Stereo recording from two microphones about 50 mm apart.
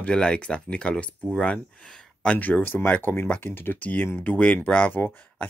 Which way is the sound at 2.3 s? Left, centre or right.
Left.